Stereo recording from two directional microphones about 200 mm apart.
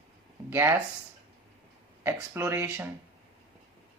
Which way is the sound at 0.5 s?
10° right (ahead or behind).